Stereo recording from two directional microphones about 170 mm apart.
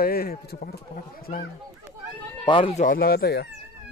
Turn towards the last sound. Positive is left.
turn(degrees=65)  # may be behind; listen again after turning